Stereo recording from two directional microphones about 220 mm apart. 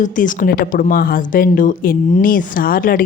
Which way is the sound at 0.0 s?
35° left (ahead or behind).